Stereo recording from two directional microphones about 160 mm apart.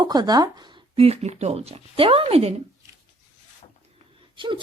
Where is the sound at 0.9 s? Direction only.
40° right (ahead or behind).